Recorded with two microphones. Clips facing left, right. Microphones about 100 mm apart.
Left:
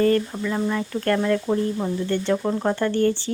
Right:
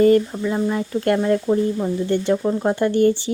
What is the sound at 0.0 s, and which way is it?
Speech, 20° right (ahead or behind).